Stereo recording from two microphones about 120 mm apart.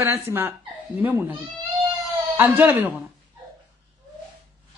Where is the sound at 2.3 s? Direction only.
20° right (ahead or behind).